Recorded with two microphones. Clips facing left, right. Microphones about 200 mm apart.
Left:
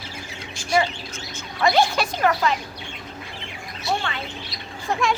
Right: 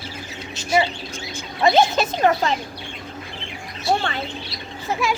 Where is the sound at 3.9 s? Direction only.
35° right (ahead or behind).